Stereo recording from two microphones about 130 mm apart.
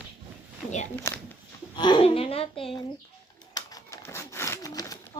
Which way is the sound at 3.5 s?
30° left (ahead or behind).